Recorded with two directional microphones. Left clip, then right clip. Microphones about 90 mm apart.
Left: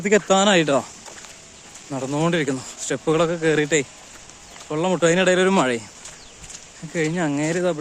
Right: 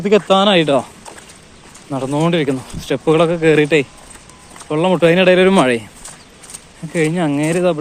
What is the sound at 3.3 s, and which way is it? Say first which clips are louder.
Speech: right 7 dB; 10° left (ahead or behind).